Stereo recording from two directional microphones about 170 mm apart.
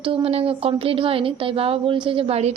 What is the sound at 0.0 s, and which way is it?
A woman's voice, 30° right (ahead or behind).